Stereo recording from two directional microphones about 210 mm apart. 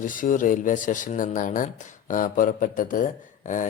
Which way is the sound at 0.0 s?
40° left (ahead or behind).